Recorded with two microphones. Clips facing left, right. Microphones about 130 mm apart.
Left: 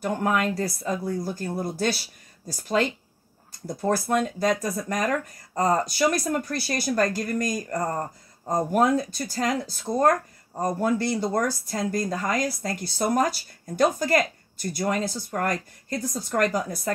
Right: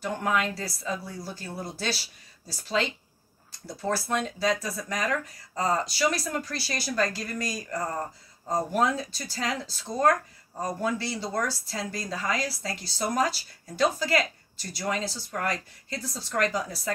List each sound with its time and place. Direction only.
0.0 s speech: 45° left (ahead or behind)
4.1 s speech: 50° left (ahead or behind)